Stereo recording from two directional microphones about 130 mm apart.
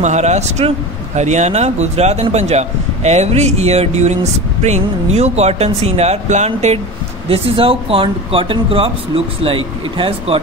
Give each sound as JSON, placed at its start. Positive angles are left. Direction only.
{"t": 0.0, "sound": "speech", "side_deg": -60}
{"t": 7.2, "sound": "speech", "side_deg": -45}